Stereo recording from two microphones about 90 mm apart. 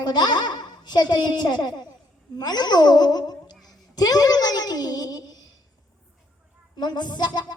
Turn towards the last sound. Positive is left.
turn(degrees=55)  # may be behind; listen again after turning